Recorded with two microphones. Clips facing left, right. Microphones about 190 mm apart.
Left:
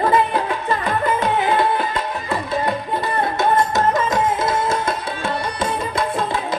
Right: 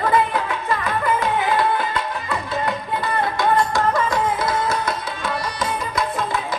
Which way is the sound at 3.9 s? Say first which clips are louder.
Left 2 dB; 25° left (ahead or behind).